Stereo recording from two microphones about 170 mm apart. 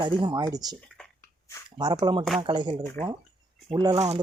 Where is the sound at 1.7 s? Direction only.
25° right (ahead or behind).